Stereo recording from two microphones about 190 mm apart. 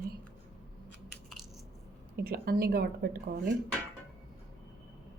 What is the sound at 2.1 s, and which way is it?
Speech, 55° right (ahead or behind).